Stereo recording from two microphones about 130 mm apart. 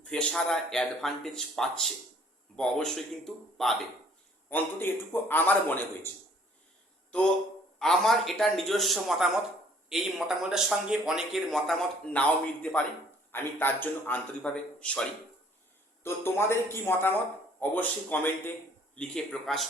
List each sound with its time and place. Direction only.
0.0 s speech: 10° left (ahead or behind)
4.4 s a man's voice: 15° left (ahead or behind)
7.8 s speech: centre (ahead or behind)
13.3 s a man's voice: 15° left (ahead or behind)
16.0 s a man's voice: 20° left (ahead or behind); by 19.6 s 5° left (ahead or behind)